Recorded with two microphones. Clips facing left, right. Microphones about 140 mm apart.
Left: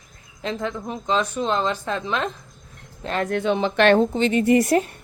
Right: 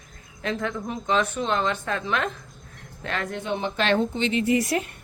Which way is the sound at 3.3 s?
80° left.